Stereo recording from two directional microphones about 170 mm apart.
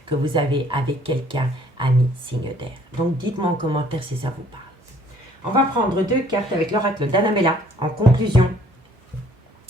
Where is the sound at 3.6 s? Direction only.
30° right (ahead or behind).